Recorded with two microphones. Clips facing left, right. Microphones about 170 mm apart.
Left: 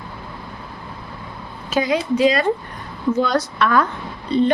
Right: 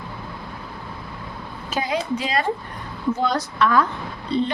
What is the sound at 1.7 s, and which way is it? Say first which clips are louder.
Speech: left 5 dB; 90° left.